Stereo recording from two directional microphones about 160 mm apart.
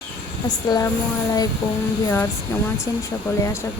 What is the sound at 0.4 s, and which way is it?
Speech, 25° left (ahead or behind).